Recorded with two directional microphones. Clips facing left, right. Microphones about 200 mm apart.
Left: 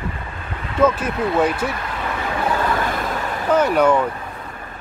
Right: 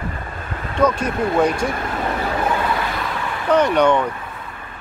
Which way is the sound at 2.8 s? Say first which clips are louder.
Left 2 dB; 45° left (ahead or behind).